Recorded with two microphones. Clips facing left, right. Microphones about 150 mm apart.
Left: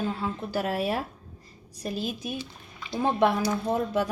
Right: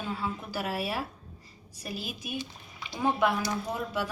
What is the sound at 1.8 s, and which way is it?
A woman's voice, 10° right (ahead or behind).